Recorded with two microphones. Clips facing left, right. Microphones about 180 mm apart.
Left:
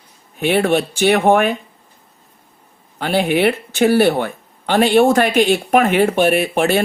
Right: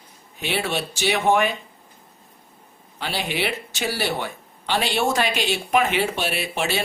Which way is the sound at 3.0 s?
55° left (ahead or behind).